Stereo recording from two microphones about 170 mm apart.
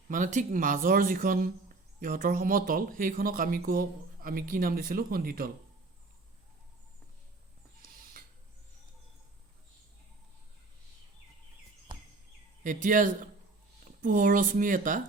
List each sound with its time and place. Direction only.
0.1 s speech: 45° right (ahead or behind)
7.9 s mechanisms: 60° right (ahead or behind)
12.6 s speech: 50° right (ahead or behind)